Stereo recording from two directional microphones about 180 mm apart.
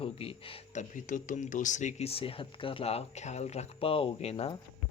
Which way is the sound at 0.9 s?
45° left (ahead or behind).